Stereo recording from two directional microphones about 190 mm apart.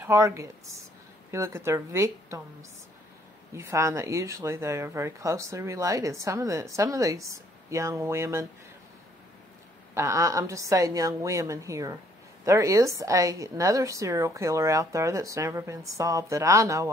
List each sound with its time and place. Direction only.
0.0 s speech: 15° right (ahead or behind)
3.5 s speech: 15° right (ahead or behind)
9.9 s speech: 15° right (ahead or behind)